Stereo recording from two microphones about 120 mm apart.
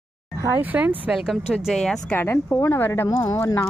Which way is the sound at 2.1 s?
15° left (ahead or behind).